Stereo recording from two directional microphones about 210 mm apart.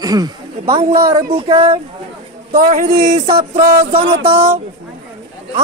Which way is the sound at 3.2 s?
30° right (ahead or behind).